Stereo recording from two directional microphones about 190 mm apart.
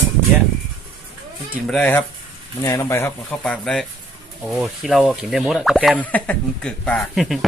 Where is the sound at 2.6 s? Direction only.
15° left (ahead or behind).